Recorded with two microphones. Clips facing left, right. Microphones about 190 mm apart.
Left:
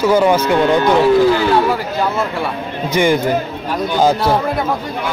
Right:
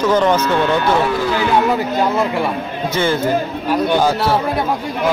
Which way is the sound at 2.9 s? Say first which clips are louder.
Left 4 dB; 15° left (ahead or behind).